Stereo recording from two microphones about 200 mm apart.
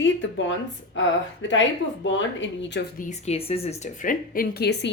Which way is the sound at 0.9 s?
70° left (ahead or behind).